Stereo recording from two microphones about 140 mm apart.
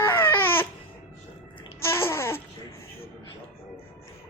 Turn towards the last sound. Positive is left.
turn(degrees=20)  # may be behind; listen again after turning